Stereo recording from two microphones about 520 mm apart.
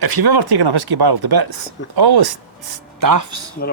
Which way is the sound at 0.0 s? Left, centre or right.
Right.